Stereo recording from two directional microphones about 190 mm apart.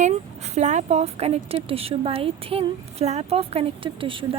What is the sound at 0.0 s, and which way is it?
Speech, 35° right (ahead or behind).